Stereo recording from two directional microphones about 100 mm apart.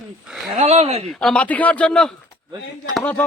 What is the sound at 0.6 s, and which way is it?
Speech, 90° right.